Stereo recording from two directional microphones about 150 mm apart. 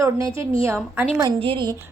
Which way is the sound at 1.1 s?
30° right (ahead or behind).